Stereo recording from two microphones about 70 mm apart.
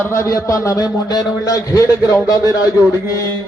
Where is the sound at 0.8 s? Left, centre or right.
Left.